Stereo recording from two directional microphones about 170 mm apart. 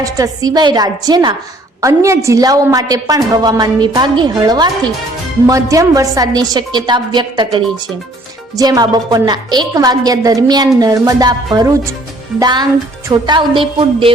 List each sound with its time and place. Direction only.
0.0 s a woman's voice: 20° right (ahead or behind)